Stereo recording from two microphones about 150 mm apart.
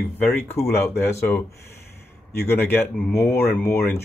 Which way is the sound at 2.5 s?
15° left (ahead or behind).